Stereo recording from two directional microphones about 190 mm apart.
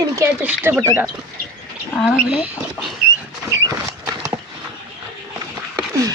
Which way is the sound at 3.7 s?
20° right (ahead or behind).